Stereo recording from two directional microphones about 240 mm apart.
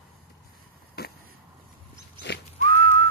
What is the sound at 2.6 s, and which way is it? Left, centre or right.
Whistling, right.